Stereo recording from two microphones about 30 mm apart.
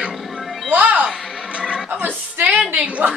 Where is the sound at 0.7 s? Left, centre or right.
Right.